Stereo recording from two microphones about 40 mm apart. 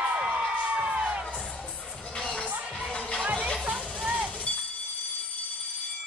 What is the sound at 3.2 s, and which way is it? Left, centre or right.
Music, right.